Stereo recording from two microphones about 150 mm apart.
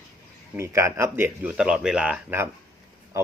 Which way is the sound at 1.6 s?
5° right (ahead or behind).